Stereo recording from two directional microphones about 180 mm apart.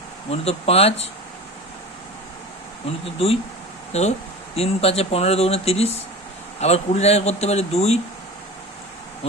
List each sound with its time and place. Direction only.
0.3 s speech: 35° left (ahead or behind)
2.8 s speech: 35° left (ahead or behind)